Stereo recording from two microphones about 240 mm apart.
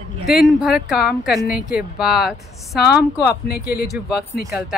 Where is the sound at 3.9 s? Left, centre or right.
Centre.